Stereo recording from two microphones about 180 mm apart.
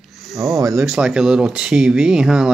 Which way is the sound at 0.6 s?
15° right (ahead or behind).